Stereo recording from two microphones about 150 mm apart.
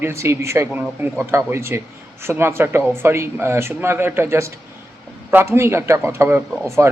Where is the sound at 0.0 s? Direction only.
20° right (ahead or behind).